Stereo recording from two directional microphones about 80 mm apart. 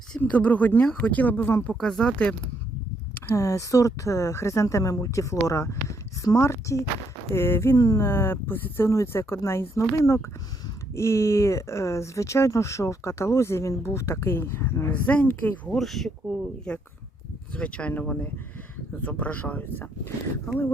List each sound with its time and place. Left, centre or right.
0.2 s speech: centre
1.8 s speech: centre
3.3 s speech: left; by 15.7 s centre
15.7 s speech: centre; by 20.1 s left